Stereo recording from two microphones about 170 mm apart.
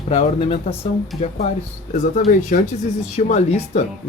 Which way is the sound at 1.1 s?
Centre (ahead or behind).